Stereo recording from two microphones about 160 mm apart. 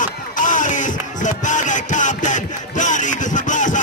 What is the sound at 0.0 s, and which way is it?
Music, 55° left (ahead or behind).